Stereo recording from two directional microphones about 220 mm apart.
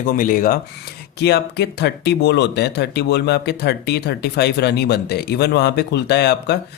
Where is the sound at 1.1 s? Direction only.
50° left (ahead or behind).